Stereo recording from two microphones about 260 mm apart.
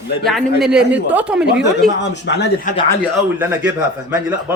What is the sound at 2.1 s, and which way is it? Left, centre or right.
Speech, left.